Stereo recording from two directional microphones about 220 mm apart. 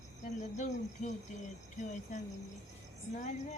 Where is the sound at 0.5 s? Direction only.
35° left (ahead or behind).